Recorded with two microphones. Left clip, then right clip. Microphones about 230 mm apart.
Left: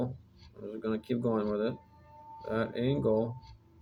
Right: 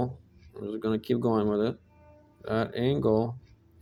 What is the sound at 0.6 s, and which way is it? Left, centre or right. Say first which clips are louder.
Speech: right 5 dB; right.